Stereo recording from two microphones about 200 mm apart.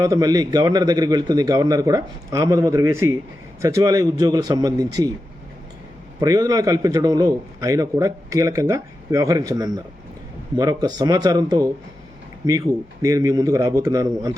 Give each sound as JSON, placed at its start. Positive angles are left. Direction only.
{"t": 0.0, "sound": "a man's voice", "side_deg": -15}
{"t": 6.1, "sound": "a man's voice", "side_deg": -20}